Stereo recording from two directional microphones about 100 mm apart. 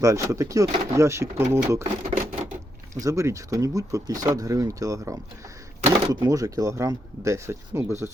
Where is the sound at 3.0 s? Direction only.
35° right (ahead or behind).